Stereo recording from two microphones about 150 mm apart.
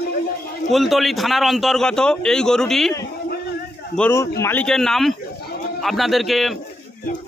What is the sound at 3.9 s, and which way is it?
A man's voice, 10° left (ahead or behind).